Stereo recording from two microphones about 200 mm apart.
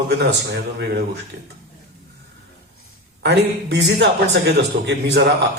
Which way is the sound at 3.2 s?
60° right (ahead or behind).